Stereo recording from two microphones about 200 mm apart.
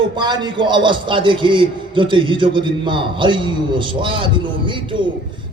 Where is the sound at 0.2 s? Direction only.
20° right (ahead or behind).